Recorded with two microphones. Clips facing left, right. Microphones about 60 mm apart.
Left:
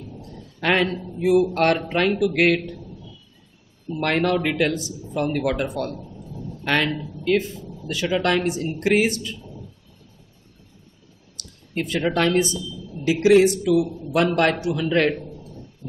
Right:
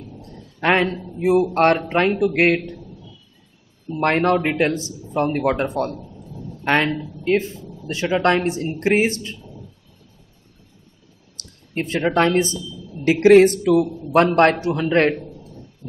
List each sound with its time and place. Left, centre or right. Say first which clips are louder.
0.2 s a sound: right 4 dB; right
0.9 s a man's voice: left 1 dB; centre
1.2 s speech: right 2 dB; right
3.9 s speech: right 3 dB; right
5.9 s a sound: even; centre
6.6 s a man's voice: right 3 dB; right
11.3 s speech: right 1 dB; right
13.0 s speech: right 4 dB; right